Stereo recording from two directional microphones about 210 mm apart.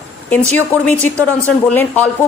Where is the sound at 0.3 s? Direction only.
5° left (ahead or behind).